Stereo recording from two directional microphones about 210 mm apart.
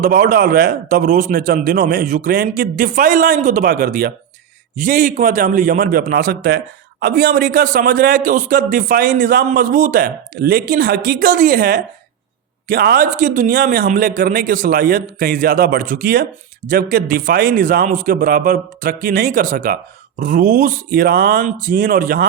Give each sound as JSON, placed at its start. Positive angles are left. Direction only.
{"t": 0.0, "sound": "a man's voice", "side_deg": -40}